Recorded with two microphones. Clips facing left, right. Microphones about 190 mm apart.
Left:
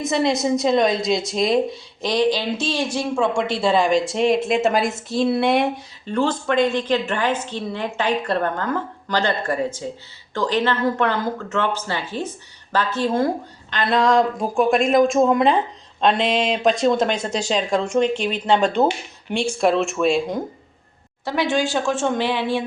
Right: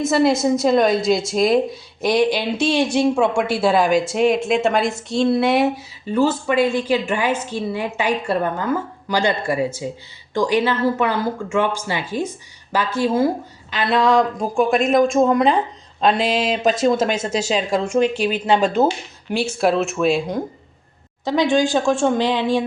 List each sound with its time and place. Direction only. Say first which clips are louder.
0.0 s a woman's voice: right 4 dB; 5° right (ahead or behind)
3.3 s a woman's voice: right 2 dB; 5° right (ahead or behind)
21.2 s a woman's voice: right 4 dB; 15° right (ahead or behind)